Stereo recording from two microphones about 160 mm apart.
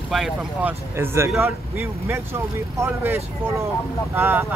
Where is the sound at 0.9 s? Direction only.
15° right (ahead or behind).